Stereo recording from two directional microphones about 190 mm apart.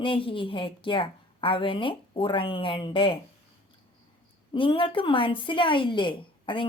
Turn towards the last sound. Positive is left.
turn(degrees=25)  # may be behind; listen again after turning